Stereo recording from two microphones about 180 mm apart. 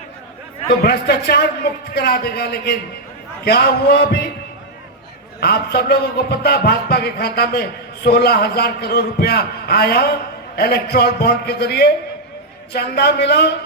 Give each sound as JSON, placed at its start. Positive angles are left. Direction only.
{"t": 0.8, "sound": "a man's voice", "side_deg": 65}
{"t": 5.4, "sound": "a man's voice", "side_deg": 60}